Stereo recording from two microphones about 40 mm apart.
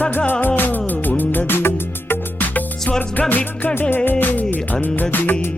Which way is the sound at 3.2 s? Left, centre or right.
Left.